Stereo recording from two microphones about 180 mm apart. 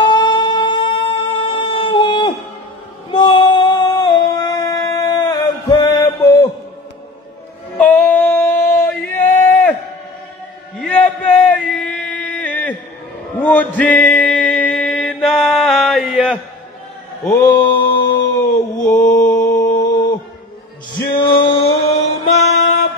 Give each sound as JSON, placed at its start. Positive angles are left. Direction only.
{"t": 0.1, "sound": "humming", "side_deg": 25}
{"t": 3.1, "sound": "female singing", "side_deg": 30}
{"t": 7.7, "sound": "female singing", "side_deg": 10}
{"t": 10.8, "sound": "a sound", "side_deg": 5}
{"t": 13.4, "sound": "music", "side_deg": 10}
{"t": 17.2, "sound": "a sound", "side_deg": 15}
{"t": 19.3, "sound": "mantra", "side_deg": 15}
{"t": 21.2, "sound": "music", "side_deg": 30}